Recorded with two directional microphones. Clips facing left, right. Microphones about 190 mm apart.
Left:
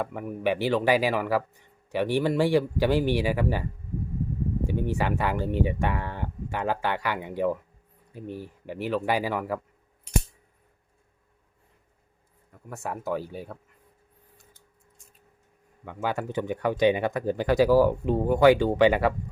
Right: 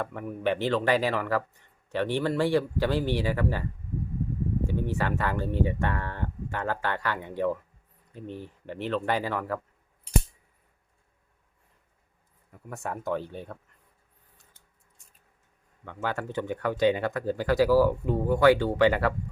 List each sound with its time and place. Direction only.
0.0 s speech: 10° left (ahead or behind)
12.6 s speech: centre (ahead or behind)
15.8 s speech: 10° left (ahead or behind)